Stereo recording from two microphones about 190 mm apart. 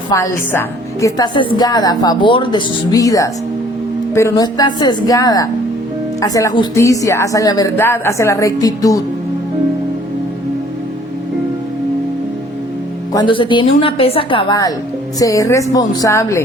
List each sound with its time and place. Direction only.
1.0 s a woman's voice: 20° left (ahead or behind)
13.1 s a woman's voice: 25° left (ahead or behind)